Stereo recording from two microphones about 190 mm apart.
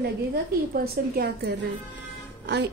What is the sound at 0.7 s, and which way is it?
A woman's voice, 55° right (ahead or behind).